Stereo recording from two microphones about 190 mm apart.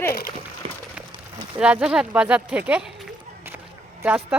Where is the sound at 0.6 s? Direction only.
30° right (ahead or behind).